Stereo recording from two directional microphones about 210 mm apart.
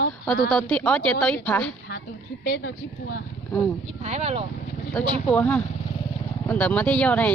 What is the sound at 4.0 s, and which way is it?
Speech, 30° right (ahead or behind).